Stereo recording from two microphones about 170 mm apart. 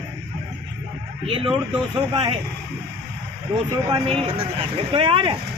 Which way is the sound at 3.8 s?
35° right (ahead or behind).